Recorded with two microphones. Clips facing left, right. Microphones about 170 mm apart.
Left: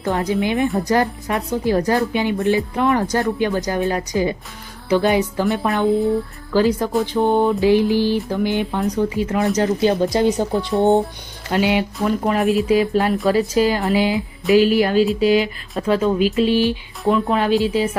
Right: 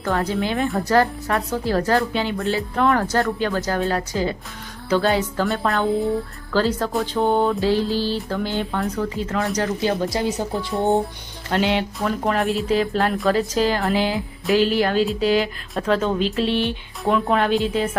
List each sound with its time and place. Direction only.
0.0 s speech: 15° left (ahead or behind)